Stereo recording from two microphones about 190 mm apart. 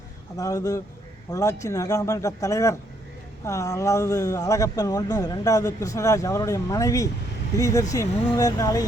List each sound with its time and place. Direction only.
0.3 s a man's voice: 20° left (ahead or behind)